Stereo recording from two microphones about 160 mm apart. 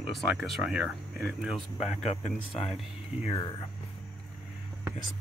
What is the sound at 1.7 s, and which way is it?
Speech, 40° left (ahead or behind).